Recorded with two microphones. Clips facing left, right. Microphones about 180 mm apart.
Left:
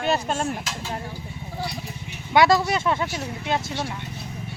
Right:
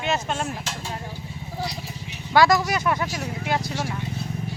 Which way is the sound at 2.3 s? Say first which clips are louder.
Even; 25° left (ahead or behind).